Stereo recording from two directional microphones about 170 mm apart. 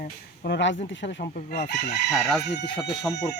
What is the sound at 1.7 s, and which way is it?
Speech, 70° left (ahead or behind).